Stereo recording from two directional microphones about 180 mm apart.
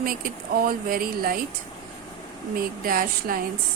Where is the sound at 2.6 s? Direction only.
55° right (ahead or behind).